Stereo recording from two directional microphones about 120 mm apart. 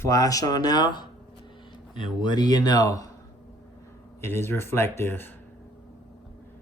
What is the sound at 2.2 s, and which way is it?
Speech, 35° left (ahead or behind).